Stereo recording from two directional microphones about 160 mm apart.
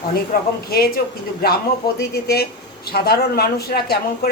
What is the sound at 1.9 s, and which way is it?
Speech, 80° left.